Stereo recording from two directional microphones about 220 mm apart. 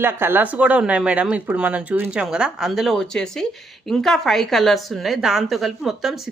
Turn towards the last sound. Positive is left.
turn(degrees=0)  # may be behind; listen again after turning